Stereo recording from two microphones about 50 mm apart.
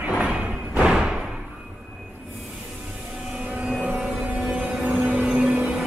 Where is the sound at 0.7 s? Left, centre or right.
Centre.